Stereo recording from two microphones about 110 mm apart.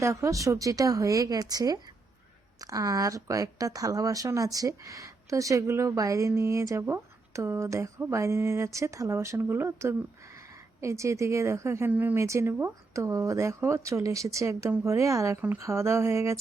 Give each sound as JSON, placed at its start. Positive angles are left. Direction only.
{"t": 0.0, "sound": "speech", "side_deg": -25}
{"t": 15.4, "sound": "speech", "side_deg": -15}